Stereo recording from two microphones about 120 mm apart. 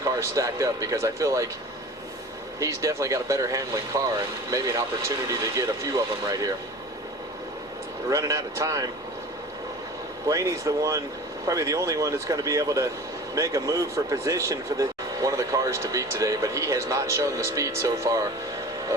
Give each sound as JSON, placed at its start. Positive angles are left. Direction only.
{"t": 0.0, "sound": "speech", "side_deg": -25}
{"t": 2.6, "sound": "speech", "side_deg": -25}
{"t": 8.1, "sound": "speech", "side_deg": -25}
{"t": 10.2, "sound": "speech", "side_deg": -25}